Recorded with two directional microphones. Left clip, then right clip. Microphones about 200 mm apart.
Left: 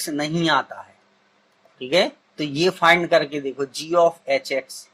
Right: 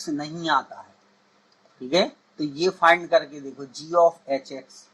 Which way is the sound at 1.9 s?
35° left (ahead or behind).